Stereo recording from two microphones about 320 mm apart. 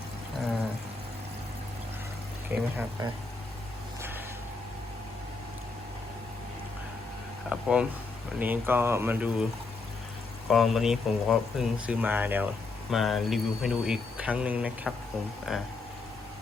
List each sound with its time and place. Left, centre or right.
2.5 s speech: centre
7.5 s speech: centre
10.5 s speech: centre